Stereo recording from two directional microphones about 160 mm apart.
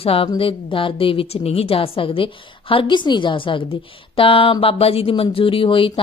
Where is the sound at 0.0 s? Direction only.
35° left (ahead or behind).